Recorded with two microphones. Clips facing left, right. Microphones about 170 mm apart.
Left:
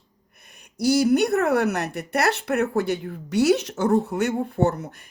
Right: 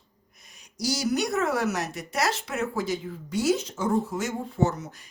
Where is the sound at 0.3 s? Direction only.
60° left (ahead or behind).